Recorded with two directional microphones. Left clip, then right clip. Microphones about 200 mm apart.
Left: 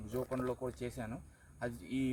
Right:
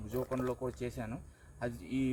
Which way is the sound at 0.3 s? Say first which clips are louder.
Right 2 dB; centre (ahead or behind).